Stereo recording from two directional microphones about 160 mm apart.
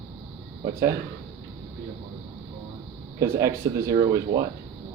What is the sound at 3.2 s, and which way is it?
Speech, 20° right (ahead or behind).